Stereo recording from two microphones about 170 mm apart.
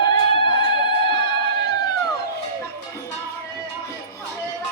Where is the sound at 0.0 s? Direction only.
30° left (ahead or behind).